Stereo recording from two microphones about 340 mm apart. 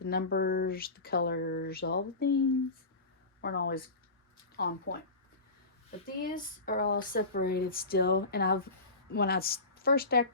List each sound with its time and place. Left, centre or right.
0.0 s speech: left
3.4 s speech: left
6.1 s speech: left